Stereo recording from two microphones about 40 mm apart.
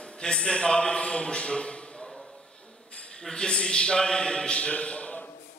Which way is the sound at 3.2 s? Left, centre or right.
Centre.